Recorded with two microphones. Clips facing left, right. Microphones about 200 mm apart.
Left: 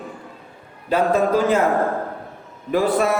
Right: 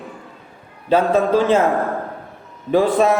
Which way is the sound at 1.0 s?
Centre (ahead or behind).